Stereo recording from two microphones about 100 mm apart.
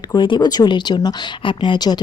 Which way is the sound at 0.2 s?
45° left (ahead or behind).